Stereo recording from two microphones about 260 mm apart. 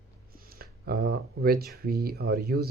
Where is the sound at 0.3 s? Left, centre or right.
Right.